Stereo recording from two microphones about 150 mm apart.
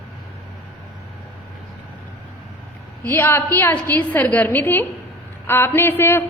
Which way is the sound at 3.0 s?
15° left (ahead or behind).